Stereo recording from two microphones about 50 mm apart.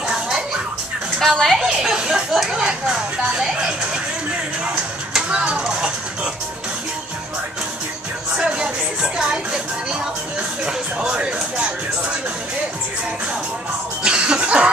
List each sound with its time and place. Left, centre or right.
1.2 s a woman's voice: centre
1.7 s speech: centre
5.3 s speech: right
8.4 s speech: centre
14.0 s speech: centre